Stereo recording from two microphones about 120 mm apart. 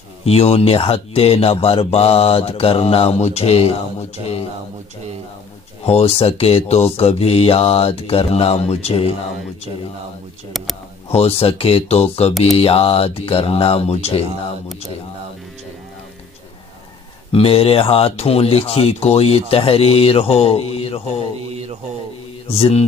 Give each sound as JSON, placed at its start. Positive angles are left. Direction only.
{"t": 0.2, "sound": "speech", "side_deg": 60}
{"t": 5.9, "sound": "speech", "side_deg": 55}
{"t": 11.1, "sound": "speech", "side_deg": 55}
{"t": 17.3, "sound": "speech", "side_deg": 50}
{"t": 22.5, "sound": "speech", "side_deg": 55}